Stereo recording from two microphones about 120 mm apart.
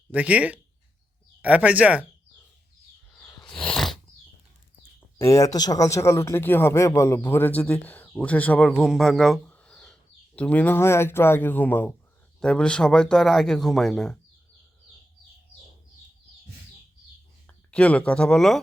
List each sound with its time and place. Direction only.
0.1 s speech: 10° right (ahead or behind)
3.4 s a sound: 5° left (ahead or behind)
5.1 s speech: 25° left (ahead or behind)
8.8 s speech: centre (ahead or behind)
17.4 s speech: 10° left (ahead or behind)